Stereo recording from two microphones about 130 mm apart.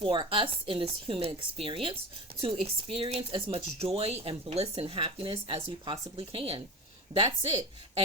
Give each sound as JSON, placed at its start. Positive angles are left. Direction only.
{"t": 0.0, "sound": "speech", "side_deg": -40}
{"t": 7.1, "sound": "speech", "side_deg": -35}